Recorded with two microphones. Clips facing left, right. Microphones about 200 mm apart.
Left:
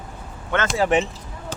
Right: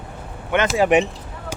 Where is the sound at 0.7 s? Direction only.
15° right (ahead or behind).